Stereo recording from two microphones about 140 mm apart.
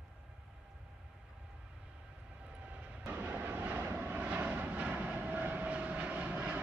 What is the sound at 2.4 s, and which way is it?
Vehicle, 10° right (ahead or behind).